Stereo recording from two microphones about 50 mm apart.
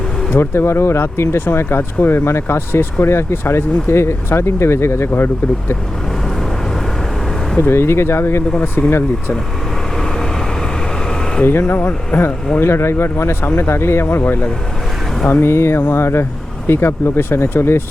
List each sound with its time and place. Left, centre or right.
0.3 s speech: left
1.5 s speech: left
5.1 s speech: left
7.6 s speech: left
8.5 s speech: left
11.4 s speech: left
12.1 s speech: left
12.5 s speech: left